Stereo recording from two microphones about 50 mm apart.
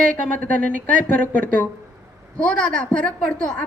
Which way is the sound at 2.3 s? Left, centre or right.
Centre.